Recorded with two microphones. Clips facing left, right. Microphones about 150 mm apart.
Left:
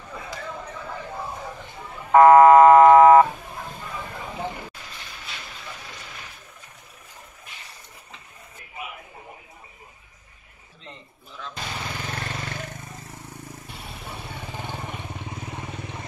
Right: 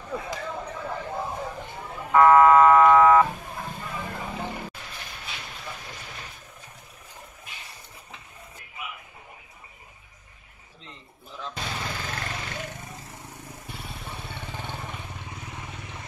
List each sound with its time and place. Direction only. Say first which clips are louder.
2.1 s buzzer: left 4 dB; 35° left (ahead or behind)